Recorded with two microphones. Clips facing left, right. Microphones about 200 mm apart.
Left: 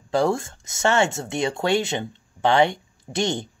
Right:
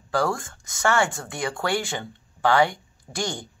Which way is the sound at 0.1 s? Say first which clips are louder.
Left 4 dB; 25° left (ahead or behind).